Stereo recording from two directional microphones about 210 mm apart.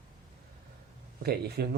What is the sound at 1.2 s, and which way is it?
Speech, 50° right (ahead or behind).